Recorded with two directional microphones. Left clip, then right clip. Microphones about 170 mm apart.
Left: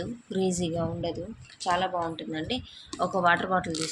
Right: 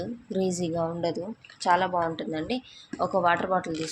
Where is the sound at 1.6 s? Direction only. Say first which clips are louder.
Right 4 dB; 25° right (ahead or behind).